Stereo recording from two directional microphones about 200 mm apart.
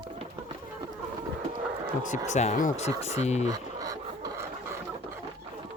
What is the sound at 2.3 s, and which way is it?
Speech, 35° left (ahead or behind).